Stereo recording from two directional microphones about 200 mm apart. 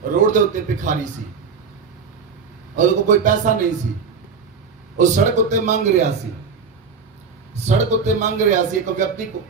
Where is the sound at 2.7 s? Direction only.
40° right (ahead or behind).